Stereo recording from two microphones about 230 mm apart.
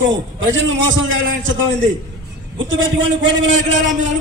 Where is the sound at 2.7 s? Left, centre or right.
Right.